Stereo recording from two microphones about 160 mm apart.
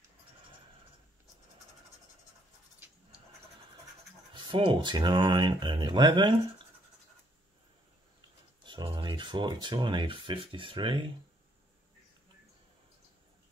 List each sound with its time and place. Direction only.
4.3 s speech: 30° right (ahead or behind)
8.6 s speech: 30° right (ahead or behind)